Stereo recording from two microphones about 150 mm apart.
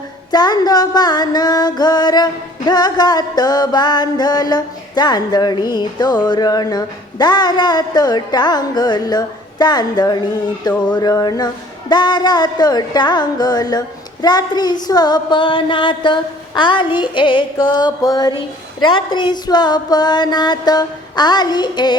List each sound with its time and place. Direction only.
0.3 s music: 25° left (ahead or behind)